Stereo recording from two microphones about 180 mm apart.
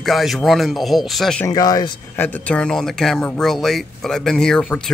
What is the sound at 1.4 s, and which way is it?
Speech, 20° left (ahead or behind).